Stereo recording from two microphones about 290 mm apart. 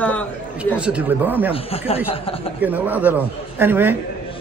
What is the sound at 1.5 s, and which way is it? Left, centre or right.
Speech, centre.